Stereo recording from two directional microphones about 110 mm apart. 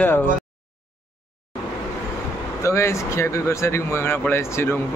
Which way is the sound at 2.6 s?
25° left (ahead or behind).